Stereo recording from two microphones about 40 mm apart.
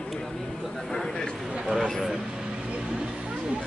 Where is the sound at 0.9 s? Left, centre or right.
Centre.